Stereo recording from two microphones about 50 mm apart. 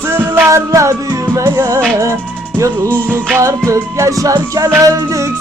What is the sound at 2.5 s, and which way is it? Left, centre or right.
Music, right.